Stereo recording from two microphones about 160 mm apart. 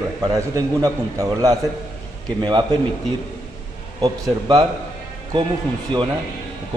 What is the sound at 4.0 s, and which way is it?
Speech, 25° right (ahead or behind).